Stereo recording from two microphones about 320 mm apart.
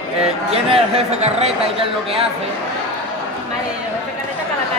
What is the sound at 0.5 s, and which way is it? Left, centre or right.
A man's voice, centre.